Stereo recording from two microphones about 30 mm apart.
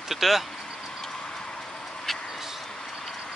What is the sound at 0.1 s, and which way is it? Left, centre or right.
Speech, centre.